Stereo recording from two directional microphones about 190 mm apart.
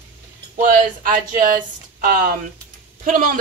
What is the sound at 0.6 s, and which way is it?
A woman's voice, 45° right (ahead or behind).